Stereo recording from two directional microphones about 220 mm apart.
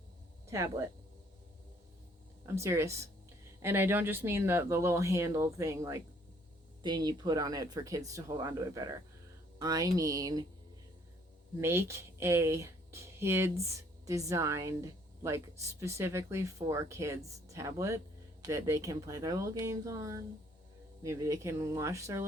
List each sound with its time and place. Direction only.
0.4 s speech: 15° right (ahead or behind)
2.6 s speech: 10° right (ahead or behind)
11.6 s speech: 10° right (ahead or behind)